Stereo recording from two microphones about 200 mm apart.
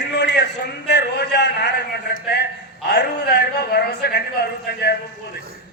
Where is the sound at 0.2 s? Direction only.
60° left (ahead or behind).